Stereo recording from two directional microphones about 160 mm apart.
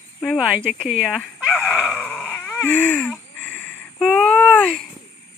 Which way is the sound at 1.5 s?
10° left (ahead or behind).